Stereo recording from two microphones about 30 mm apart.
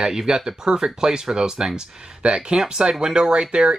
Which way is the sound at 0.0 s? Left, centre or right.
Centre.